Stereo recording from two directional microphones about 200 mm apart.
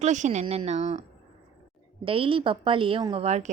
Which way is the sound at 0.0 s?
35° right (ahead or behind).